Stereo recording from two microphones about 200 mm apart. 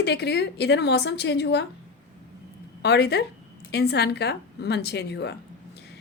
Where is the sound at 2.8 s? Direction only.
55° left (ahead or behind).